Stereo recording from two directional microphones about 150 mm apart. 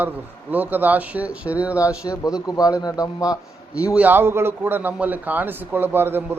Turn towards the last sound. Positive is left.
turn(degrees=-15)  # may be behind; listen again after turning